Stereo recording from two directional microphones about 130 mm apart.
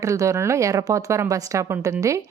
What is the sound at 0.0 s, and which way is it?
Speech, 25° right (ahead or behind).